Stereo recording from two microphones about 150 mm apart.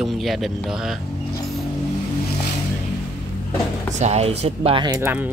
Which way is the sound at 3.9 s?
45° right (ahead or behind).